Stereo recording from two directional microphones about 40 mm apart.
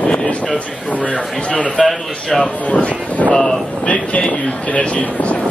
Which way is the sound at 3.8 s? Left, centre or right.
Left.